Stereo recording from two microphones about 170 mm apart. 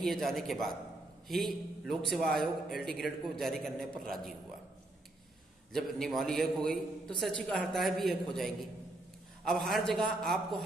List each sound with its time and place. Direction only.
0.0 s a man's voice: centre (ahead or behind)
5.7 s a man's voice: centre (ahead or behind)